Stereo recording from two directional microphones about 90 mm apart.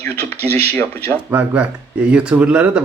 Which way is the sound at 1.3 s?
20° right (ahead or behind).